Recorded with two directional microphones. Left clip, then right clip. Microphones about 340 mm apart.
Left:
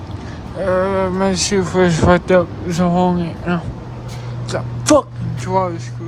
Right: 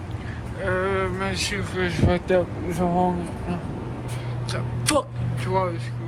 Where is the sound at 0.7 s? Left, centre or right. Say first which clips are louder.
Left 8 dB; centre.